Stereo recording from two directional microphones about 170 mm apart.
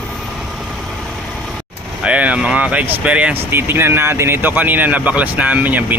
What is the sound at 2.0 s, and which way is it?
Speech, 5° right (ahead or behind).